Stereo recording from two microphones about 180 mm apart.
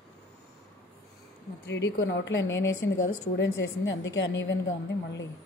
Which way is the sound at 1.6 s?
75° left (ahead or behind).